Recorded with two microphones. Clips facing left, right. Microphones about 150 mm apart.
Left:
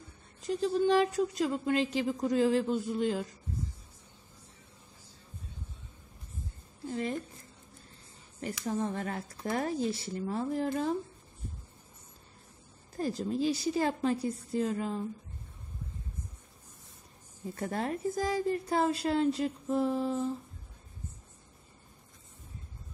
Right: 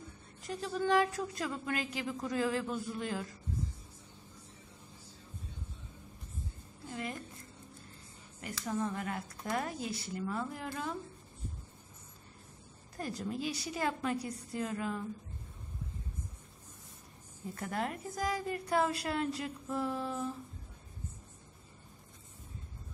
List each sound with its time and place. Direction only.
0.5 s a woman's voice: 25° left (ahead or behind)
8.6 s speech: 35° left (ahead or behind)
13.0 s a woman's voice: 30° left (ahead or behind)
17.6 s a woman's voice: 30° left (ahead or behind)